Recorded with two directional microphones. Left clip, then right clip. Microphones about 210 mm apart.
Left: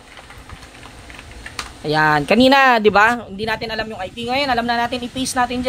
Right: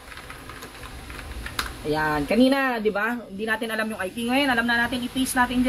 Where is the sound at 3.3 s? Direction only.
30° left (ahead or behind).